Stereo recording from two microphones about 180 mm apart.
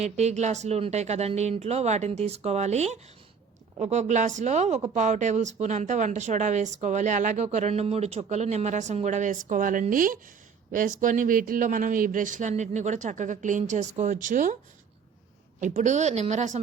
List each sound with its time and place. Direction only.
0.0 s speech: 40° right (ahead or behind)
15.6 s speech: 40° right (ahead or behind)